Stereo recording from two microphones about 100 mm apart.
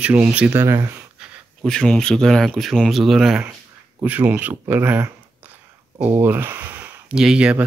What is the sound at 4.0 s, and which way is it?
Speech, 15° right (ahead or behind).